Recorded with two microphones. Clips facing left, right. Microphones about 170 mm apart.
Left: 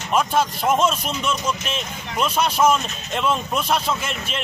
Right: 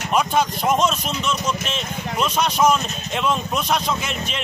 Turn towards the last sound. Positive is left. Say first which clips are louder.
# even
turn(degrees=5)  # may be behind; listen again after turning